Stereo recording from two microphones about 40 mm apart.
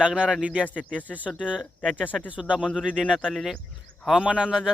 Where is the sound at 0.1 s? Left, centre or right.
Centre.